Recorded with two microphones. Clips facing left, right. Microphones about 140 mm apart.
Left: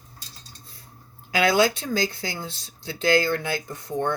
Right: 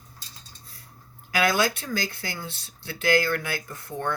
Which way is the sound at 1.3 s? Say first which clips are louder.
Left 3 dB; 20° left (ahead or behind).